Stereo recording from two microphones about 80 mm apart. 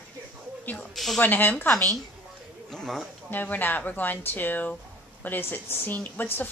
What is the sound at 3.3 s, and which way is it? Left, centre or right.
A woman's voice, left.